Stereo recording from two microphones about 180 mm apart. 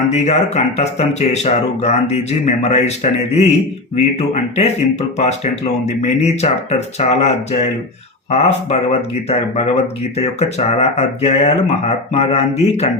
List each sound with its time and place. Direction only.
0.1 s speech: 40° left (ahead or behind)
6.0 s speech: 40° left (ahead or behind)